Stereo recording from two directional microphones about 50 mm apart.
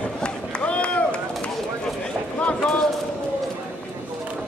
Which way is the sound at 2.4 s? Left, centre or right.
Left.